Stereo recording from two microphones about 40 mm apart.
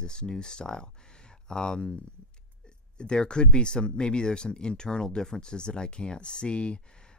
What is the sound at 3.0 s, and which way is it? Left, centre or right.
Speech, left.